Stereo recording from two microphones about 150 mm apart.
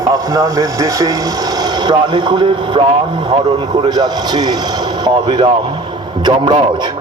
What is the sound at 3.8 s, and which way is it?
Speech, 30° right (ahead or behind).